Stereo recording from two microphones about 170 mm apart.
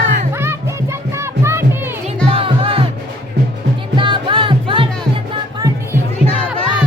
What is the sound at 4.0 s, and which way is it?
Music, 30° right (ahead or behind).